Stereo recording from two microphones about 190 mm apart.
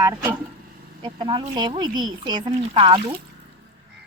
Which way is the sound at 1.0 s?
25° right (ahead or behind).